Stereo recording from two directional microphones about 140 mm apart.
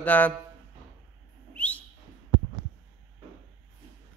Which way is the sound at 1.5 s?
10° left (ahead or behind).